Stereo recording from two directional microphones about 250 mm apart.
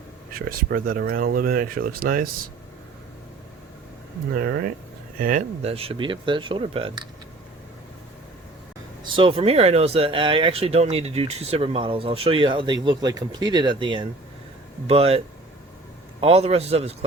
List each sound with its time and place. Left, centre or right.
0.3 s speech: right
4.4 s speech: right; by 7.1 s centre
9.1 s speech: right
16.2 s speech: right